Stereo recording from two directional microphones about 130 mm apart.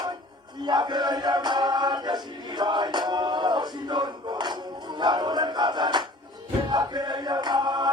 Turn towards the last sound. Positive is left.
turn(degrees=-35)  # may be behind; listen again after turning